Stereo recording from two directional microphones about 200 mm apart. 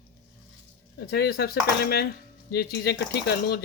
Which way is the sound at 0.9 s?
50° left (ahead or behind).